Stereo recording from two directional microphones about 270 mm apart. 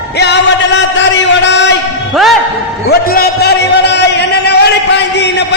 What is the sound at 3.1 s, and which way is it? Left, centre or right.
Music, left.